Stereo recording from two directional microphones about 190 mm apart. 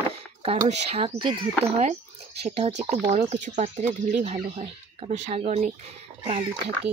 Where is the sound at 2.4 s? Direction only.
35° right (ahead or behind).